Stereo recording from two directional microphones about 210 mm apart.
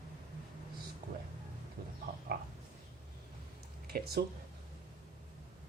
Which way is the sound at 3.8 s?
45° right (ahead or behind).